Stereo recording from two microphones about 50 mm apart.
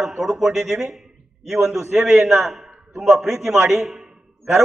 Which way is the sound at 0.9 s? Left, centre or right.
Centre.